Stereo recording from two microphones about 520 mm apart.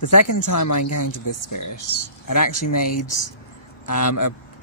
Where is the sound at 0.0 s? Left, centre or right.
Left.